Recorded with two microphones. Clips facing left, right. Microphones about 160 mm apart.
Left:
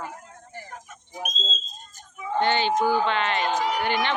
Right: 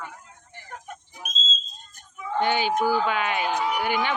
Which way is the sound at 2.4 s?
10° right (ahead or behind).